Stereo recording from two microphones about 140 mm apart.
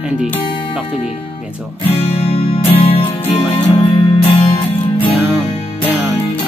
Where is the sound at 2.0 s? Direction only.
45° left (ahead or behind).